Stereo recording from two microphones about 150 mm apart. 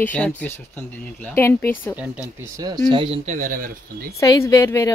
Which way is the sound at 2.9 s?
35° right (ahead or behind).